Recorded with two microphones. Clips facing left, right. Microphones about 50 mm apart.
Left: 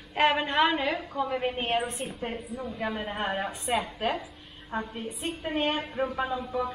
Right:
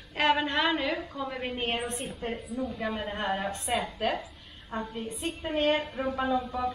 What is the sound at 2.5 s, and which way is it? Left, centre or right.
Speech, left.